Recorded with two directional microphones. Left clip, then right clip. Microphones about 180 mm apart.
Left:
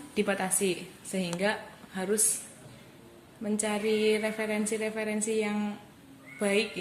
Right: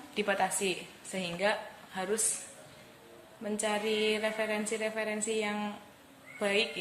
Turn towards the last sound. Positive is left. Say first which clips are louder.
# left 2 dB
turn(degrees=20)  # may be behind; listen again after turning